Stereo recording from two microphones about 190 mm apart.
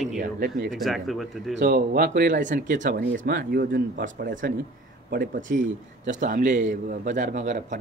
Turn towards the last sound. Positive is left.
turn(degrees=-40)  # may be behind; listen again after turning